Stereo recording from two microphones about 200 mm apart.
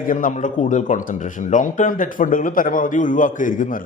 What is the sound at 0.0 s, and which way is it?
Speech, 40° left (ahead or behind).